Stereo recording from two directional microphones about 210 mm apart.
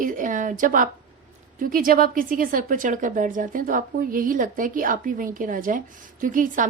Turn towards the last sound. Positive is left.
turn(degrees=-40)  # may be behind; listen again after turning